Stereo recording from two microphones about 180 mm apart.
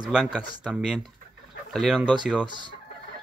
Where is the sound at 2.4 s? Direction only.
25° right (ahead or behind).